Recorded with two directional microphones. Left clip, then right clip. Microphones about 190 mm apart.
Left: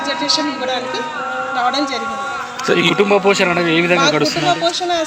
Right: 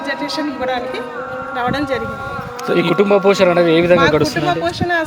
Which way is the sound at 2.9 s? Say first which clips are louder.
Right 1 dB; 65° right (ahead or behind).